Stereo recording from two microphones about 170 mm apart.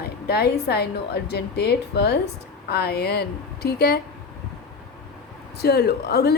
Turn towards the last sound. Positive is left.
turn(degrees=75)  # may be behind; listen again after turning